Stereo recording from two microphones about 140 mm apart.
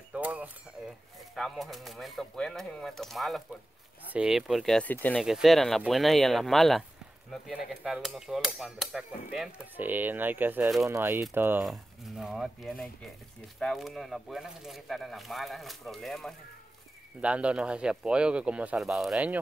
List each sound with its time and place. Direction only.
0.1 s a sound: 10° right (ahead or behind)
1.3 s speech: centre (ahead or behind)
4.8 s speech: 10° left (ahead or behind)
5.2 s speech: centre (ahead or behind)
11.6 s speech: centre (ahead or behind)